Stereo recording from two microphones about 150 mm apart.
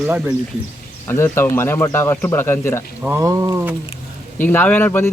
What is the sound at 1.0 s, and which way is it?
Speech, 15° left (ahead or behind).